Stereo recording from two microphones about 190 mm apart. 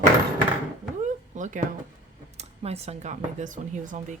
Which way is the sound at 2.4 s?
35° right (ahead or behind).